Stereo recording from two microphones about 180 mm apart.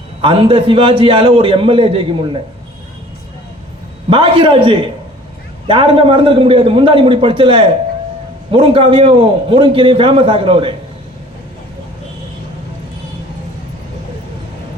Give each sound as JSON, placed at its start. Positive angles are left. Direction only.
{"t": 0.2, "sound": "a man's voice", "side_deg": -30}
{"t": 4.1, "sound": "a man's voice", "side_deg": -30}